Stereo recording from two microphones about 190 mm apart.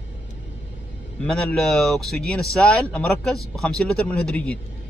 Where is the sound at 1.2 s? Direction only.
5° left (ahead or behind).